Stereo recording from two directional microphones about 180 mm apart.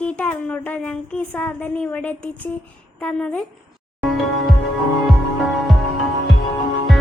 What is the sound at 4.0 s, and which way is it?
Music, centre (ahead or behind).